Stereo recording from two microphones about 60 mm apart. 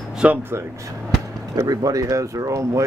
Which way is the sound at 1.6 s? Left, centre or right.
Right.